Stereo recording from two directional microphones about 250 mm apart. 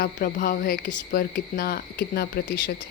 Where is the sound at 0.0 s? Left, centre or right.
Left.